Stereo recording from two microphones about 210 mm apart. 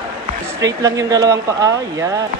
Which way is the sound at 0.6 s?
15° right (ahead or behind).